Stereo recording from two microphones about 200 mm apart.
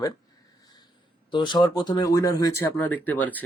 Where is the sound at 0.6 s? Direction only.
20° left (ahead or behind).